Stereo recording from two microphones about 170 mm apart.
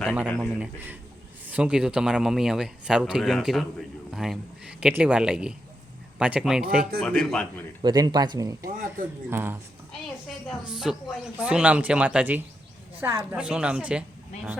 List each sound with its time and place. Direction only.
0.3 s speech: centre (ahead or behind)
7.8 s speech: 25° right (ahead or behind)
8.6 s speech: 55° right (ahead or behind)
9.3 s speech: 10° right (ahead or behind)
10.2 s speech: centre (ahead or behind)